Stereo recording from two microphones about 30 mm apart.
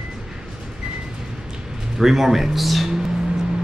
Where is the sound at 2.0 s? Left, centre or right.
Centre.